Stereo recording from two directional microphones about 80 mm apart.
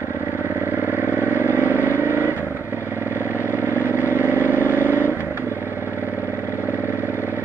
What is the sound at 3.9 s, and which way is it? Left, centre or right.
Vehicle, right.